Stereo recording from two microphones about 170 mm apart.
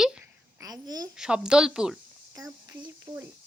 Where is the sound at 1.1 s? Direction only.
5° right (ahead or behind).